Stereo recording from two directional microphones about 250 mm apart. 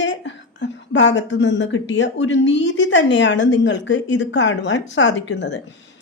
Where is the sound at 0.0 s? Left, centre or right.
Left.